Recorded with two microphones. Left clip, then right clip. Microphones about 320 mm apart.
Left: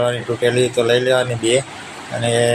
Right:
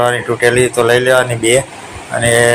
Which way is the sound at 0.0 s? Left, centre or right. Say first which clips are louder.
Right 6 dB; centre.